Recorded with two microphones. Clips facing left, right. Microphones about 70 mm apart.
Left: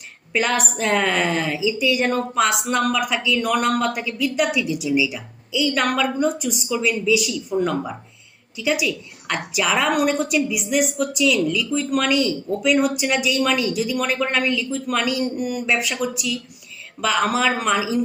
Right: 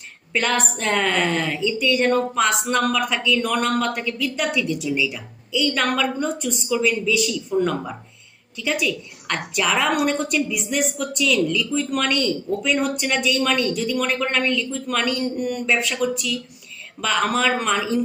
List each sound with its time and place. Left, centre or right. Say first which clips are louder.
0.3 s a woman's voice: left 1 dB; centre